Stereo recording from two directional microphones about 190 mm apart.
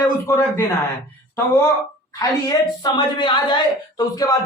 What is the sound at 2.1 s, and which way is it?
A woman's voice, 20° left (ahead or behind).